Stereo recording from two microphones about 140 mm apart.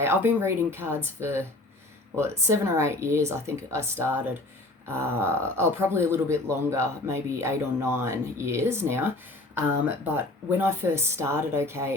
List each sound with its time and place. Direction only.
0.0 s speech: 15° right (ahead or behind)